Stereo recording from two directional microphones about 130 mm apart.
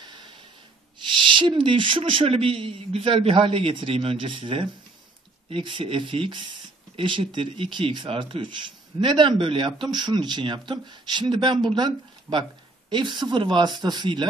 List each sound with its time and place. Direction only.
0.0 s snort: 35° right (ahead or behind)
1.0 s speech: 40° right (ahead or behind)